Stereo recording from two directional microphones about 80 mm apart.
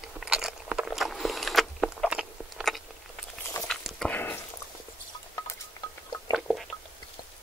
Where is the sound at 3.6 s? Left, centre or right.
Centre.